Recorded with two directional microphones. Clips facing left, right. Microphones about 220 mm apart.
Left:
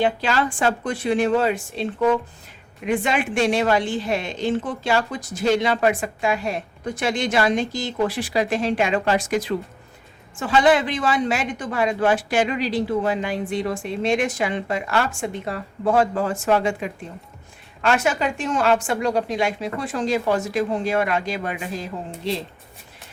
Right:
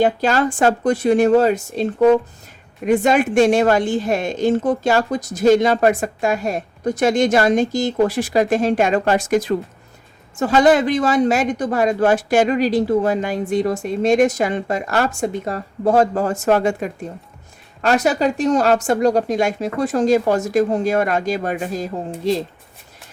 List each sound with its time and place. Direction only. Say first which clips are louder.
0.0 s a woman's voice: right 5 dB; 45° right (ahead or behind)